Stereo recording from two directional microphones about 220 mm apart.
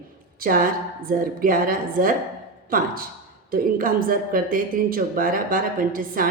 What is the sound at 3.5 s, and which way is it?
Speech, 40° right (ahead or behind).